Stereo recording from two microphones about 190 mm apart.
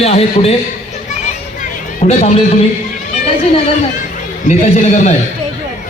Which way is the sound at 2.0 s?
40° left (ahead or behind).